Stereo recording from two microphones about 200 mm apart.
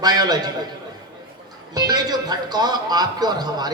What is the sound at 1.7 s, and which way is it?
A man's voice, 20° right (ahead or behind).